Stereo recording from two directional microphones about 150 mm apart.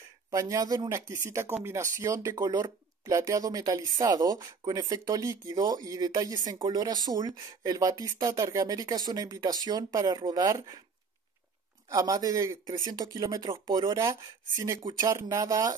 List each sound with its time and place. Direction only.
0.3 s speech: 20° right (ahead or behind)
11.9 s speech: 25° right (ahead or behind)
15.0 s speech: 20° right (ahead or behind)